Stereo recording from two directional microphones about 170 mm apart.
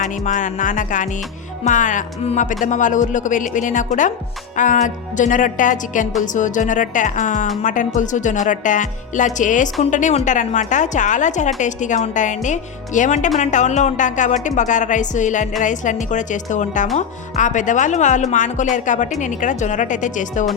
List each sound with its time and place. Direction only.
0.0 s a woman's voice: 50° left (ahead or behind)